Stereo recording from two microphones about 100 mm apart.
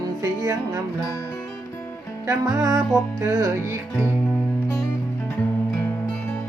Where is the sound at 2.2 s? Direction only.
35° right (ahead or behind).